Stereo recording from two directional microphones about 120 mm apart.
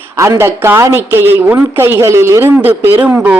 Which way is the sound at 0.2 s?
20° right (ahead or behind).